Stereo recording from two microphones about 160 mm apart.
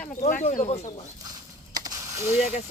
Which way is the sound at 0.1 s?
55° left (ahead or behind).